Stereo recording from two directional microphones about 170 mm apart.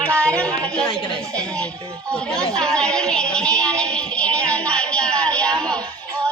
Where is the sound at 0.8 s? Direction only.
30° left (ahead or behind).